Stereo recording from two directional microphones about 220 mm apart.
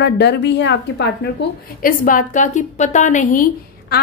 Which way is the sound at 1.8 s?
40° left (ahead or behind).